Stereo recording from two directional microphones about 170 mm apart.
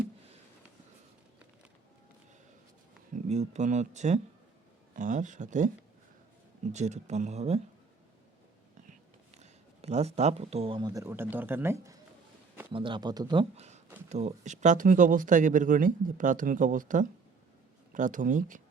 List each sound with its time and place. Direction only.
3.2 s speech: 40° right (ahead or behind)
9.4 s speech: 40° right (ahead or behind); by 11.9 s 15° right (ahead or behind)
12.7 s speech: 30° right (ahead or behind); by 18.6 s 50° right (ahead or behind)